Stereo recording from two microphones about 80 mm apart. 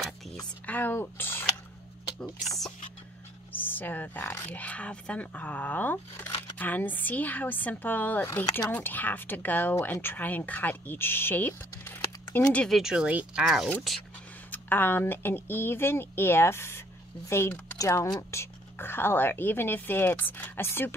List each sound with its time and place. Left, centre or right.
0.7 s speech: left
2.4 s speech: centre
3.5 s speech: left
12.6 s speech: centre
12.9 s speech: centre
14.5 s speech: left